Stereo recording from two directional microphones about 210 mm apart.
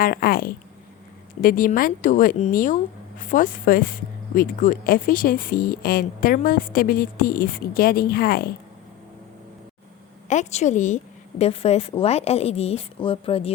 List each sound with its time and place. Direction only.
0.0 s speech: 45° left (ahead or behind)
10.2 s a woman's voice: 35° left (ahead or behind)